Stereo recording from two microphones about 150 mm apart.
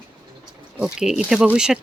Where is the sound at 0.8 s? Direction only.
5° right (ahead or behind).